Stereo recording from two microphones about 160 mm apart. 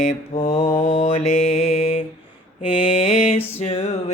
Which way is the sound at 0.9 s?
35° left (ahead or behind).